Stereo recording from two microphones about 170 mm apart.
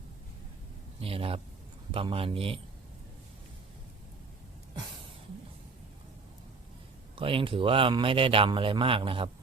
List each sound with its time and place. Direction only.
1.0 s a man's voice: 35° right (ahead or behind)
7.2 s a man's voice: 30° right (ahead or behind)